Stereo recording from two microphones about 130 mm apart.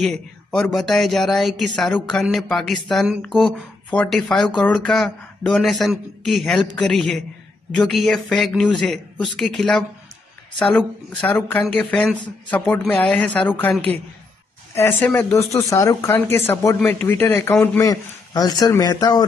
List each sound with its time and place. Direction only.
0.0 s a man's voice: 5° left (ahead or behind); by 19.2 s 30° left (ahead or behind)